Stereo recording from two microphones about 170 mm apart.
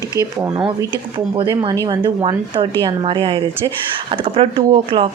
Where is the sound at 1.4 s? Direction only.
25° right (ahead or behind).